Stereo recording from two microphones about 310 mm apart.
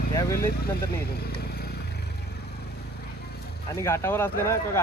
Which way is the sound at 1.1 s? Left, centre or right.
Left.